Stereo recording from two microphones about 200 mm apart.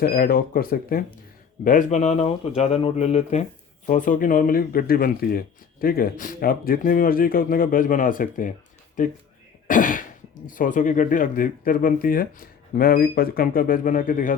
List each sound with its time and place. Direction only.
0.0 s speech: 50° left (ahead or behind)